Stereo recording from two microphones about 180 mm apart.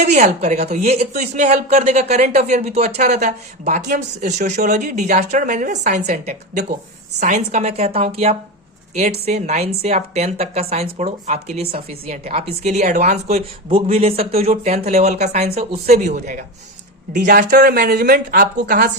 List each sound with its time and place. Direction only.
0.0 s speech: 40° right (ahead or behind)